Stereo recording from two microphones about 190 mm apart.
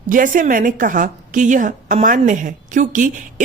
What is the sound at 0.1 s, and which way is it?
A woman's voice, 45° right (ahead or behind).